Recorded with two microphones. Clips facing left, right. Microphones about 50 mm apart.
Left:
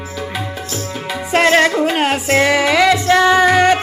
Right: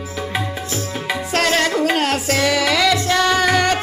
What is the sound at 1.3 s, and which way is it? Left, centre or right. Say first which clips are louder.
Music: left 6 dB; left.